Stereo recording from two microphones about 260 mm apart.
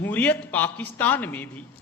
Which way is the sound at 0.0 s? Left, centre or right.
Centre.